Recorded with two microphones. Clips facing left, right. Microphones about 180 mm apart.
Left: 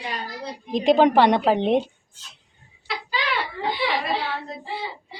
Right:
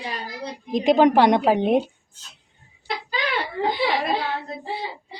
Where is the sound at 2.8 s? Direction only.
50° right (ahead or behind).